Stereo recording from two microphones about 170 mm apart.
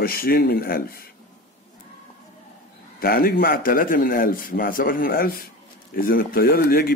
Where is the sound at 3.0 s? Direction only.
65° left (ahead or behind).